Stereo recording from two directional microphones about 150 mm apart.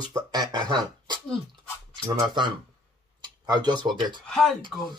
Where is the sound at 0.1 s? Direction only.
25° right (ahead or behind).